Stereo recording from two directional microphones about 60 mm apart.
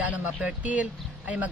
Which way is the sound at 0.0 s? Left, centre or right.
Right.